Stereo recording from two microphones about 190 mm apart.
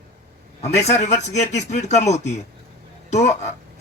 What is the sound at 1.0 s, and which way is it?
A man's voice, 35° left (ahead or behind).